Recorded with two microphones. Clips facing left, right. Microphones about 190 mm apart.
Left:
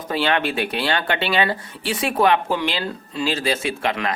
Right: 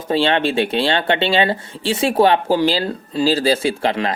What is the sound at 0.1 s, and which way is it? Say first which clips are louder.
Speech: right 5 dB; 25° right (ahead or behind).